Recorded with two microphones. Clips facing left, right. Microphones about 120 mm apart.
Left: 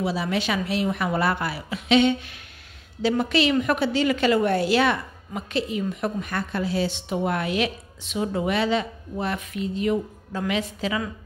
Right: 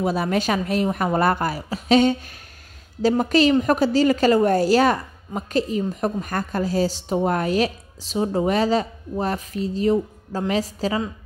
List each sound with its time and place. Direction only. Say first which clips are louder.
0.0 s a woman's voice: right 4 dB; 50° right (ahead or behind)